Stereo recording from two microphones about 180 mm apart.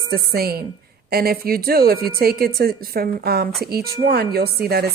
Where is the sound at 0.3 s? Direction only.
60° right (ahead or behind).